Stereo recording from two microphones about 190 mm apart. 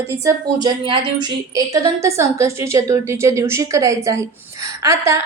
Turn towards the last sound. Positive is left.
turn(degrees=-15)  # may be behind; listen again after turning